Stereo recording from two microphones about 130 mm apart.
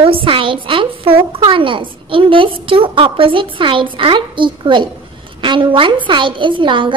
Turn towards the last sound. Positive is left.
turn(degrees=-40)  # may be behind; listen again after turning